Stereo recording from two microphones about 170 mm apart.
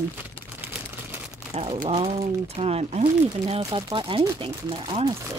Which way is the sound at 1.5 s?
35° right (ahead or behind).